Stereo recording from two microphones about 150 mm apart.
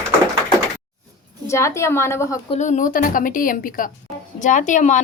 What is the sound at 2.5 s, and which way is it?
A woman's voice, 55° left (ahead or behind).